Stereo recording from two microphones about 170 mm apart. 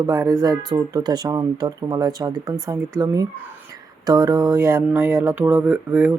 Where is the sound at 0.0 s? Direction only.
20° right (ahead or behind).